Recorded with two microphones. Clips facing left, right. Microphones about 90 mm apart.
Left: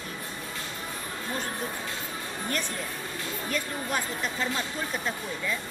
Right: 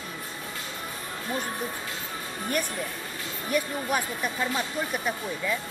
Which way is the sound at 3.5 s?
10° right (ahead or behind).